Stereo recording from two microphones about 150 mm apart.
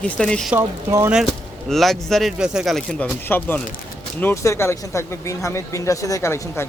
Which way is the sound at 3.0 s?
15° left (ahead or behind).